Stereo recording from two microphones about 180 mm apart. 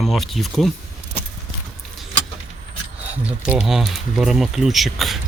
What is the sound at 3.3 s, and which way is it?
Speech, 5° right (ahead or behind).